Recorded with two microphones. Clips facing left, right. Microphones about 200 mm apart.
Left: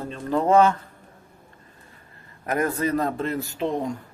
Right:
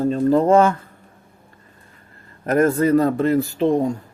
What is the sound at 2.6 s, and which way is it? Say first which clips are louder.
Speech: right 8 dB; 45° right (ahead or behind).